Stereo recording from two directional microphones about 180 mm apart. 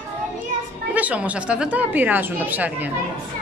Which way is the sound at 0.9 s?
10° right (ahead or behind).